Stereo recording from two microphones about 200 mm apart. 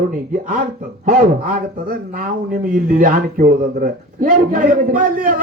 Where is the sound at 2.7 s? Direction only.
45° right (ahead or behind).